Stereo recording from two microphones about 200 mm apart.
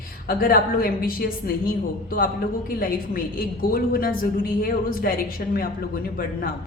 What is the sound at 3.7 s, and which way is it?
A woman's voice, 45° left (ahead or behind).